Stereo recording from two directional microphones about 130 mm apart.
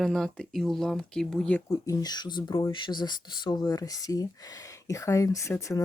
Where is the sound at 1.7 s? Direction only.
30° left (ahead or behind).